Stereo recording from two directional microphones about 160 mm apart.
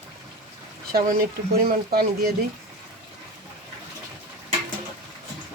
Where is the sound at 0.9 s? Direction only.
65° right (ahead or behind).